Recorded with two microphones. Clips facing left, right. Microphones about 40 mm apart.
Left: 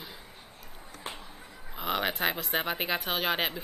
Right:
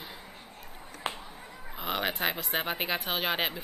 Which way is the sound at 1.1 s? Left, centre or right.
Right.